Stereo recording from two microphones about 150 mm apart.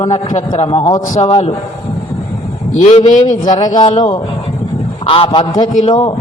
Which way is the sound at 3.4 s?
25° left (ahead or behind).